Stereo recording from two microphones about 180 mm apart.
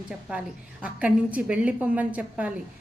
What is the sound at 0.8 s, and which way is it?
A woman's voice, 5° right (ahead or behind).